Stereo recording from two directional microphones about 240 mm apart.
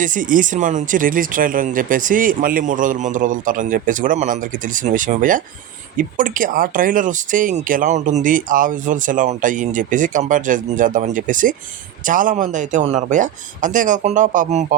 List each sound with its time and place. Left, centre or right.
0.0 s speech: right